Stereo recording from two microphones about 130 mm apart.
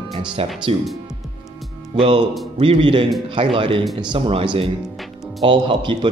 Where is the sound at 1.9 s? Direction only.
45° right (ahead or behind).